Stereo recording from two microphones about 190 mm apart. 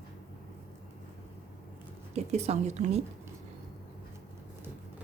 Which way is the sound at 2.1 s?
35° right (ahead or behind).